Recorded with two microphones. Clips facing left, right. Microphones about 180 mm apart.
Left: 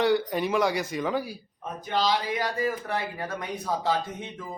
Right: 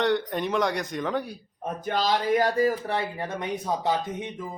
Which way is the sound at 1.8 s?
50° right (ahead or behind).